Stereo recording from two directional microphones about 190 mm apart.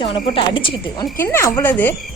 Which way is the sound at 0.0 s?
25° left (ahead or behind).